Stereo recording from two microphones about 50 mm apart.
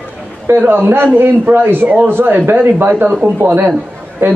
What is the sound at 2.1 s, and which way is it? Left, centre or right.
A man's voice, right.